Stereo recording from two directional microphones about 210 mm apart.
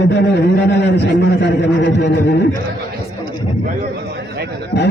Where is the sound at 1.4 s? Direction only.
55° left (ahead or behind).